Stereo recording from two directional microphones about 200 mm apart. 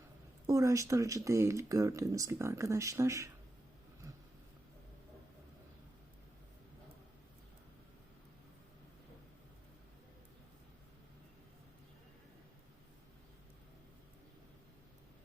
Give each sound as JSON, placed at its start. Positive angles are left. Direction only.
{"t": 0.4, "sound": "speech", "side_deg": -15}